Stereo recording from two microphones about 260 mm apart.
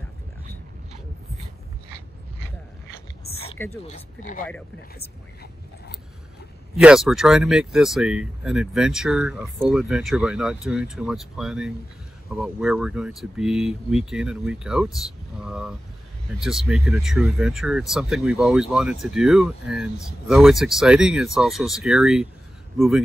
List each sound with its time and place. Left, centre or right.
3.3 s a sound: left
3.5 s speech: centre
3.8 s speech: left
6.8 s speech: centre